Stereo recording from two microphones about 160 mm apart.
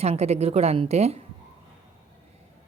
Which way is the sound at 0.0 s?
40° right (ahead or behind).